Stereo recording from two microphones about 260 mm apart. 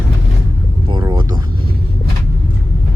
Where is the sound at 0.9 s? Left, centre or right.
Centre.